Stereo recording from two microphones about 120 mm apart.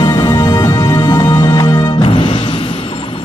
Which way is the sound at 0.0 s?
40° left (ahead or behind).